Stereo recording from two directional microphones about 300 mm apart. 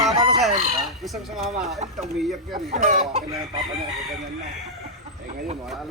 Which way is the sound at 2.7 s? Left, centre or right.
Right.